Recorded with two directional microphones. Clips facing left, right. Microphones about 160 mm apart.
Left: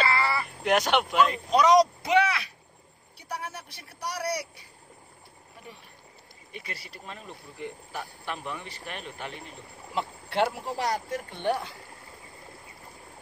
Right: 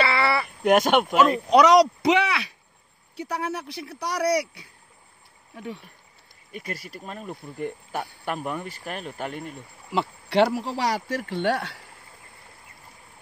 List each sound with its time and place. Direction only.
0.0 s a sound: 70° right (ahead or behind)
0.7 s speech: 50° right (ahead or behind)
1.5 s speech: 75° right (ahead or behind)
6.5 s speech: 45° right (ahead or behind)
9.9 s speech: 85° right